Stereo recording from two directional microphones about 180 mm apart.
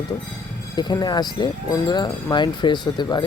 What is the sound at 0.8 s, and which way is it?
Speech, 25° left (ahead or behind).